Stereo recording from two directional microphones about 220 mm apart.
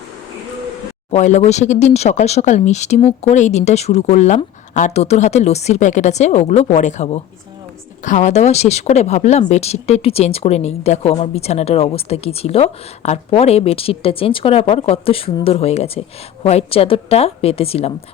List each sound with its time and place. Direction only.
1.1 s speech: 30° left (ahead or behind)